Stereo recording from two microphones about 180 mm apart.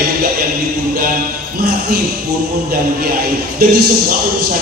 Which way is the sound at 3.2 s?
60° right (ahead or behind).